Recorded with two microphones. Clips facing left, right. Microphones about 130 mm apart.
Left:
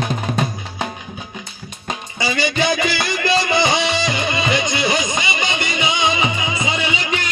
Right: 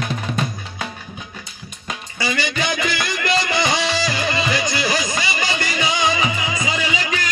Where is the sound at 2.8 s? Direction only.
30° left (ahead or behind).